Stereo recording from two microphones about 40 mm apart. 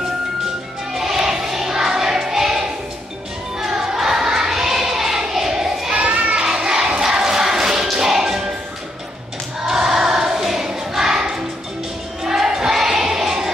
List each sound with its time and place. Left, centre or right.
0.9 s music: centre
5.9 s children playing: right
6.3 s crowd: centre
9.7 s choir: centre
12.2 s a sound: centre